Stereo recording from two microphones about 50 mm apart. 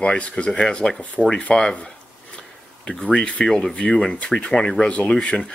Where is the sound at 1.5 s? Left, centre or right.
Left.